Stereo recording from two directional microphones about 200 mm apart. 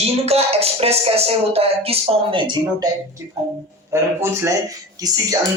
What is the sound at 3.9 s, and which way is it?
Speech, 15° right (ahead or behind).